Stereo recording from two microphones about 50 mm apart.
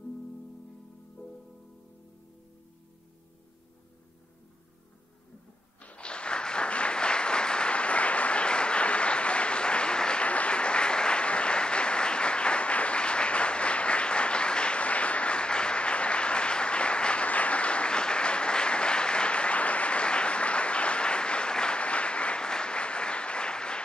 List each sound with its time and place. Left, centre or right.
5.8 s applause: left